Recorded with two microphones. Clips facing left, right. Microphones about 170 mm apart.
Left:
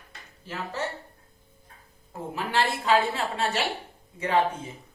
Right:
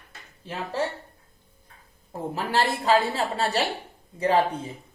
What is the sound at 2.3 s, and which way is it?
A woman's voice, 35° right (ahead or behind).